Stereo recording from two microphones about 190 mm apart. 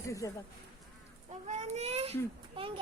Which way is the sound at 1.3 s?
35° right (ahead or behind).